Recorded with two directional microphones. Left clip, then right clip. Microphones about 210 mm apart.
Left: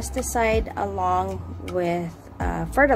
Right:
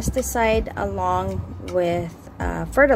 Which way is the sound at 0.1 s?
10° right (ahead or behind).